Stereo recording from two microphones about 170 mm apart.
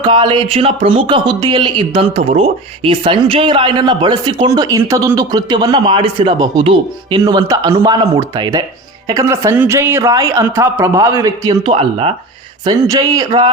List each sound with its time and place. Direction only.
0.0 s speech: 30° right (ahead or behind)
11.8 s speech: 35° right (ahead or behind)
12.6 s speech: 20° right (ahead or behind)